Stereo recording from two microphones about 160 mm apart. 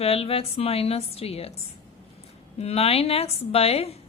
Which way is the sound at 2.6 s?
40° left (ahead or behind).